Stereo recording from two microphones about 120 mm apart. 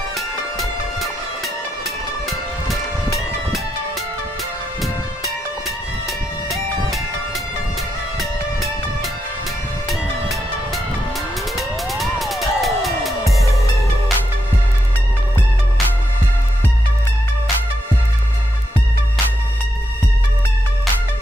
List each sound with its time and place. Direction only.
0.6 s music: centre (ahead or behind)
8.2 s music: centre (ahead or behind)
11.5 s music: centre (ahead or behind)